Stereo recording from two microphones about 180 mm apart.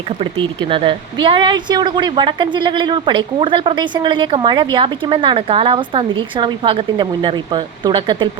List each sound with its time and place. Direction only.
0.2 s a woman's voice: 30° right (ahead or behind)